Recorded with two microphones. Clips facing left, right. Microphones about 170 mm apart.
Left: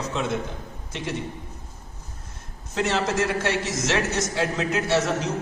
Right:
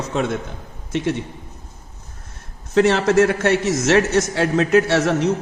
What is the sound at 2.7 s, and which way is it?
A man's voice, 60° right (ahead or behind).